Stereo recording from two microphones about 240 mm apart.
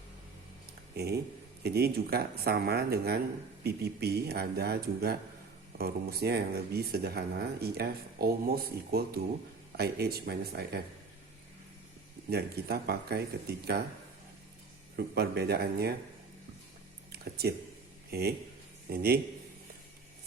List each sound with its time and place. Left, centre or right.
0.9 s speech: right
12.3 s speech: right
14.9 s speech: right
17.1 s a sound: right
18.1 s speech: right